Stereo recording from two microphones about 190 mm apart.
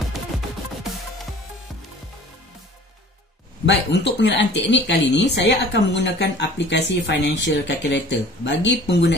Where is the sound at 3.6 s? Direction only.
65° left (ahead or behind).